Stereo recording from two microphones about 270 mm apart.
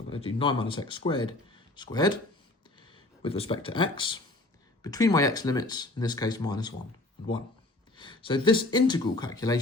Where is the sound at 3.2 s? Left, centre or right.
Left.